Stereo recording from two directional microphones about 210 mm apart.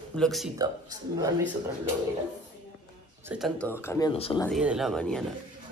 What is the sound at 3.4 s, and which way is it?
Speech, 10° left (ahead or behind).